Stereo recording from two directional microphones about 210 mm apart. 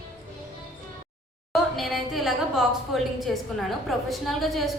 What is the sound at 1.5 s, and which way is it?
A woman's voice, centre (ahead or behind).